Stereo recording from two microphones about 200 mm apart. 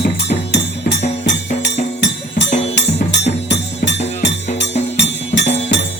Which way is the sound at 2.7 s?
60° left (ahead or behind).